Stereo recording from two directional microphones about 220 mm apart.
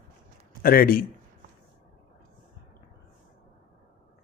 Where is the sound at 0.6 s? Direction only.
40° left (ahead or behind).